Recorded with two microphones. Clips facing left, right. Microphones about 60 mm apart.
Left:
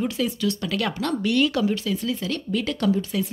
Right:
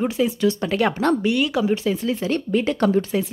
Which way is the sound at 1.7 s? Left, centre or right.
Right.